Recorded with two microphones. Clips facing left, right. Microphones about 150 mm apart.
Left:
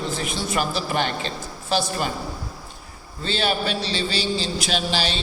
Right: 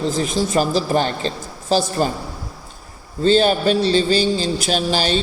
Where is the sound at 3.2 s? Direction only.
45° right (ahead or behind).